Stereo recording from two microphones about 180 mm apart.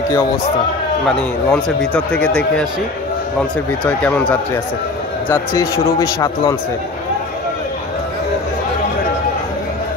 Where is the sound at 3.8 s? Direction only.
5° left (ahead or behind).